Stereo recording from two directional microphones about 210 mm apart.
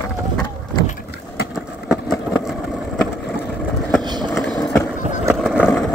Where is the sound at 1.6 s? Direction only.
Centre (ahead or behind).